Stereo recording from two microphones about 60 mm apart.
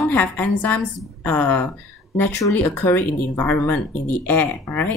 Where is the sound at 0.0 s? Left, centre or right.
Left.